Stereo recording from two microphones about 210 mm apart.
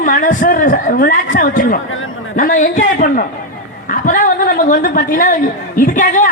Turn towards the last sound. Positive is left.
turn(degrees=40)  # may be behind; listen again after turning